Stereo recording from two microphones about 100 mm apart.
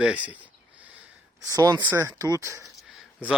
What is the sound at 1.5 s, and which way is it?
Speech, 35° right (ahead or behind).